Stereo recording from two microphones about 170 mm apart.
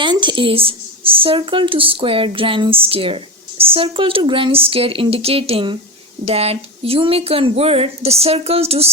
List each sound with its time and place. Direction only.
0.0 s speech: 30° right (ahead or behind)